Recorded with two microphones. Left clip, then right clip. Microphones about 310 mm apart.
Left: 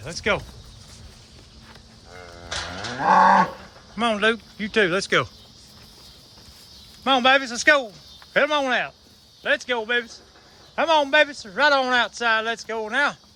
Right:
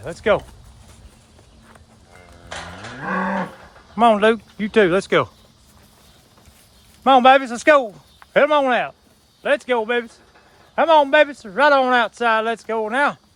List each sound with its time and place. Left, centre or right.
0.0 s speech: centre
3.0 s livestock: centre
3.9 s speech: centre
7.0 s a man's voice: centre